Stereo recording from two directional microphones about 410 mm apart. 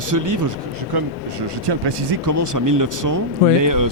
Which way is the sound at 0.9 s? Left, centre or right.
Right.